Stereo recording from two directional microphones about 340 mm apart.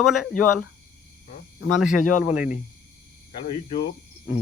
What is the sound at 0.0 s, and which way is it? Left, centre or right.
Speech, centre.